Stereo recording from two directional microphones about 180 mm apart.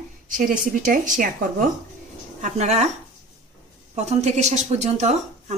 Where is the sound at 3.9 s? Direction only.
40° right (ahead or behind).